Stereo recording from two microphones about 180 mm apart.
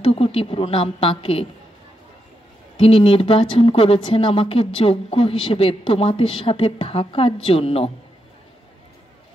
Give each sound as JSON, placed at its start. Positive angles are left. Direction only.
{"t": 0.0, "sound": "a woman's voice", "side_deg": 30}
{"t": 2.8, "sound": "a woman's voice", "side_deg": 30}